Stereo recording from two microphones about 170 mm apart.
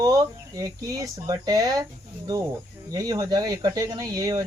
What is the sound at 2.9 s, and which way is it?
Speech, 20° right (ahead or behind).